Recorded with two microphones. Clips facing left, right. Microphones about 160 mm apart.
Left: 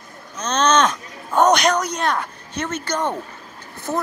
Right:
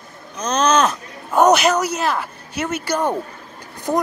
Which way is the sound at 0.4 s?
10° right (ahead or behind).